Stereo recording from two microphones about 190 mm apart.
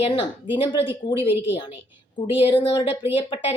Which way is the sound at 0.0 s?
25° left (ahead or behind).